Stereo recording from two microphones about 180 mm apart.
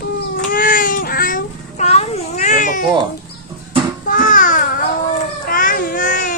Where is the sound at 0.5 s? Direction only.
50° left (ahead or behind).